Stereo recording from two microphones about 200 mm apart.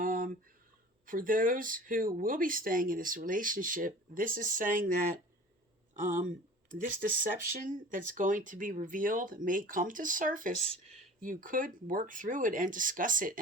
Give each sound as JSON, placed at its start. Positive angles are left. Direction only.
{"t": 0.0, "sound": "a sound", "side_deg": -45}
{"t": 1.0, "sound": "speech", "side_deg": -45}
{"t": 5.9, "sound": "speech", "side_deg": -40}